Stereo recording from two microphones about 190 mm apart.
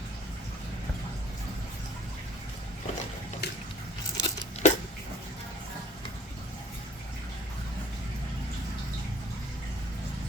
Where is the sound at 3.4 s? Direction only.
60° left (ahead or behind).